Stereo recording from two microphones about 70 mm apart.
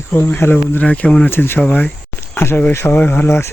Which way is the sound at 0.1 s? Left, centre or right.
Left.